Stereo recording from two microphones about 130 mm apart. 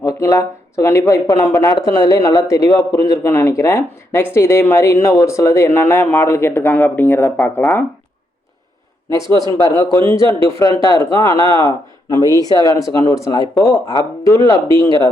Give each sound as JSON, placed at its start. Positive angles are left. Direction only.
{"t": 0.0, "sound": "speech", "side_deg": 25}
{"t": 9.0, "sound": "speech", "side_deg": 25}
{"t": 10.2, "sound": "a man's voice", "side_deg": -45}
{"t": 10.6, "sound": "speech", "side_deg": 30}